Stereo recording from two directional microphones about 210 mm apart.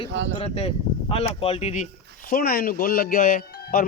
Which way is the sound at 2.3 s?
45° left (ahead or behind).